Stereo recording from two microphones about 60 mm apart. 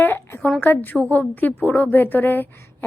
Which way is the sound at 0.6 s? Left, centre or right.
Left.